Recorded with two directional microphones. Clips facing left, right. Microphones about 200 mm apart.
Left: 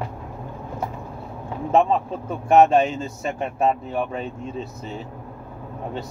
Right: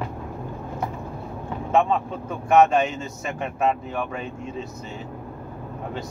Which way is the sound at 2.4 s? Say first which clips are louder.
Left 2 dB; 35° left (ahead or behind).